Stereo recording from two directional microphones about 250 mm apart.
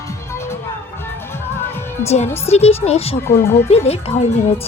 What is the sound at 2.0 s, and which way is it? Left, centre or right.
Speech, left.